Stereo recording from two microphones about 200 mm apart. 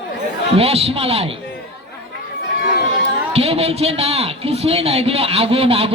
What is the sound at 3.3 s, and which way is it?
A man's voice, 30° right (ahead or behind).